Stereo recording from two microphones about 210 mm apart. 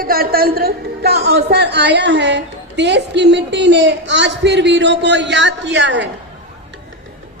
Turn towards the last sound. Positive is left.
turn(degrees=-60)  # may be behind; listen again after turning